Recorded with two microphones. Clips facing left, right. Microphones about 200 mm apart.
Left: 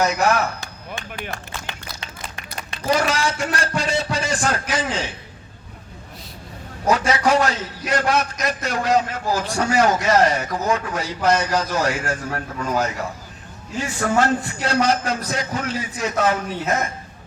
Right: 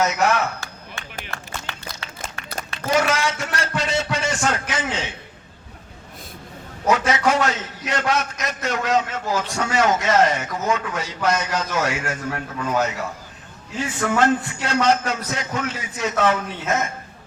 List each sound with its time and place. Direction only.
0.0 s a man's voice: 35° left (ahead or behind)
1.0 s a sound: 15° left (ahead or behind)
1.3 s run: 15° left (ahead or behind)
3.0 s a man's voice: 35° left (ahead or behind)
6.8 s a man's voice: 35° left (ahead or behind)